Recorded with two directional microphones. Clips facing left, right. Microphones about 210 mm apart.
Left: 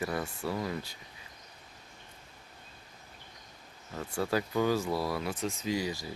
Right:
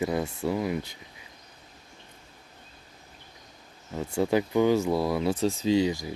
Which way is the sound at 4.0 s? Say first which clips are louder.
Right 6 dB; 20° right (ahead or behind).